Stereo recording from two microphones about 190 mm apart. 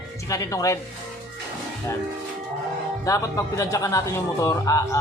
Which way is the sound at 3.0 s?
15° left (ahead or behind).